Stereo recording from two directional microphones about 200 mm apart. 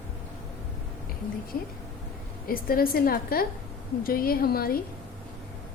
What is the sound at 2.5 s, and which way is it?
Speech, 45° left (ahead or behind).